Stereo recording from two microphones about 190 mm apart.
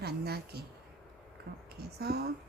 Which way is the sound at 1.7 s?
55° right (ahead or behind).